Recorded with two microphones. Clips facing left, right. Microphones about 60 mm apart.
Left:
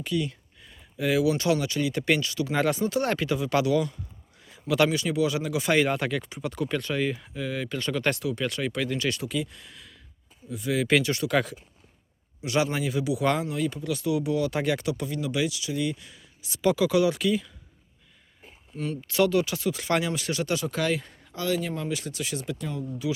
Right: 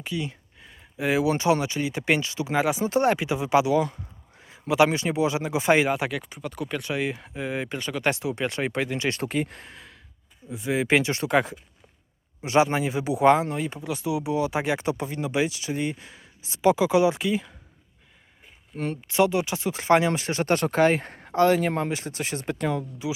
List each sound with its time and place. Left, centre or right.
0.0 s a sound: centre
1.6 s speech: right
2.6 s speech: centre
4.4 s a sound: right
4.9 s speech: right
5.8 s speech: centre
7.8 s speech: centre
9.1 s speech: right
19.0 s speech: right
22.5 s speech: right
23.0 s speech: right